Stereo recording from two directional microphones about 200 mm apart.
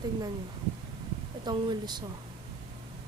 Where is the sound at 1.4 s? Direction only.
20° right (ahead or behind).